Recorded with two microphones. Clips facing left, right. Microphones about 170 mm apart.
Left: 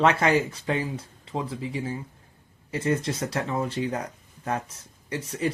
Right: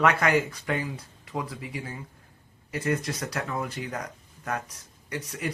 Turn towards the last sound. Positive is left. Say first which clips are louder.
# left 5 dB
turn(degrees=30)  # may be behind; listen again after turning